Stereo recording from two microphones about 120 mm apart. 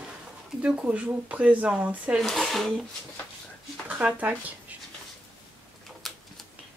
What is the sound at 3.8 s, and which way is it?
Speech, 15° right (ahead or behind).